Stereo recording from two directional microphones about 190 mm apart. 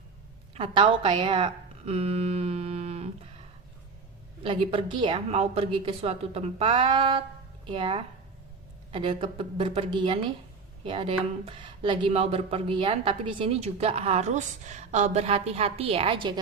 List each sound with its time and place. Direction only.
0.5 s speech: 30° right (ahead or behind)
4.4 s a woman's voice: 25° right (ahead or behind)